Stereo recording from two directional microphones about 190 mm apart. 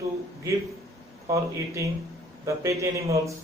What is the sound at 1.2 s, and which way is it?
Speech, 15° right (ahead or behind).